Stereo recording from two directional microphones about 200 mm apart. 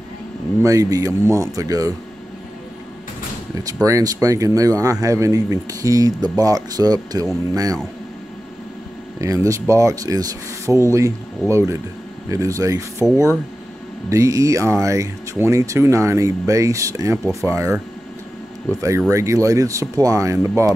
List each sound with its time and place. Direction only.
0.6 s speech: 15° right (ahead or behind)
3.8 s speech: 15° right (ahead or behind)
9.2 s speech: 15° right (ahead or behind)
14.0 s speech: 15° right (ahead or behind)